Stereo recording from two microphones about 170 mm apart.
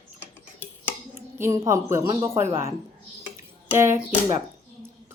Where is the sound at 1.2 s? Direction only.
15° right (ahead or behind).